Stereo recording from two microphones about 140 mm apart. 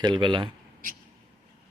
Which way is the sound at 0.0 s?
35° right (ahead or behind).